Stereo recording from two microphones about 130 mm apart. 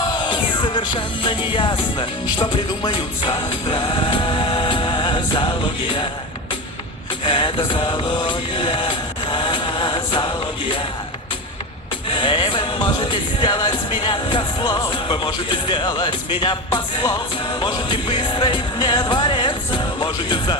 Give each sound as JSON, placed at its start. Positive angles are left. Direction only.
{"t": 0.0, "sound": "music", "side_deg": 35}
{"t": 7.3, "sound": "a sound", "side_deg": 40}
{"t": 12.1, "sound": "music", "side_deg": 40}